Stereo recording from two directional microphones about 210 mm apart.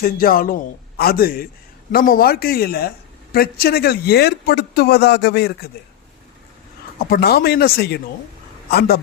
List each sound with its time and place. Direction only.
0.0 s a man's voice: 45° left (ahead or behind)
7.0 s a man's voice: 45° left (ahead or behind)